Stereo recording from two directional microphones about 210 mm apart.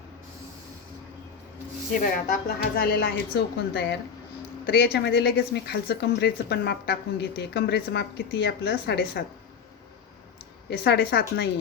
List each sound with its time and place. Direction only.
1.9 s speech: 40° left (ahead or behind)
10.7 s speech: 50° left (ahead or behind)